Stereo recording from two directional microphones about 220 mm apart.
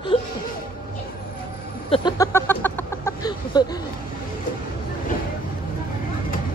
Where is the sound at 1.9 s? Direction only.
20° left (ahead or behind).